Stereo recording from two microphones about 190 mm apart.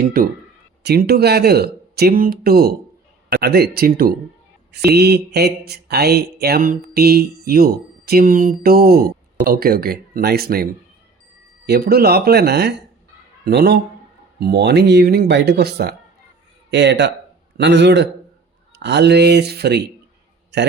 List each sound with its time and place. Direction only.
0.0 s a man's voice: 50° right (ahead or behind)